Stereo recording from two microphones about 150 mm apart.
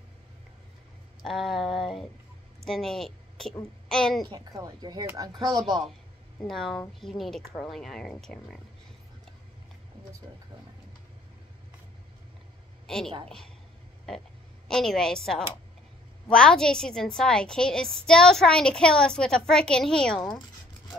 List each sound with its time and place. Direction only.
1.2 s a woman's voice: centre (ahead or behind)
4.3 s a woman's voice: 25° right (ahead or behind)
6.4 s a woman's voice: centre (ahead or behind)
12.8 s a woman's voice: 5° left (ahead or behind)